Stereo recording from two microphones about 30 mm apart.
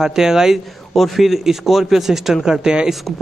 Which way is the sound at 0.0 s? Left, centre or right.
Centre.